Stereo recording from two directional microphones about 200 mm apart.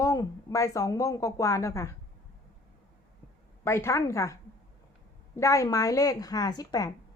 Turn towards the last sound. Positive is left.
turn(degrees=20)  # may be behind; listen again after turning